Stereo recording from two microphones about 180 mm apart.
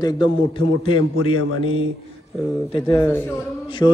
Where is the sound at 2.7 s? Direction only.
30° left (ahead or behind).